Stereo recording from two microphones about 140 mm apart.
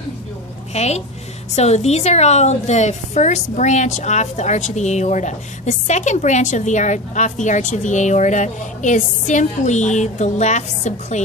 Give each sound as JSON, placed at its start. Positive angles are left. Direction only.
{"t": 0.7, "sound": "a woman's voice", "side_deg": 50}